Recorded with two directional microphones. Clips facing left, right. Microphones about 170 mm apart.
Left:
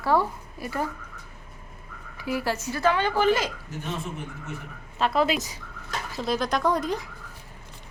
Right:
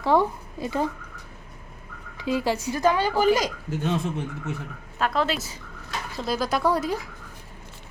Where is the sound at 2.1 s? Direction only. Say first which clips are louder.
Right 3 dB; 20° right (ahead or behind).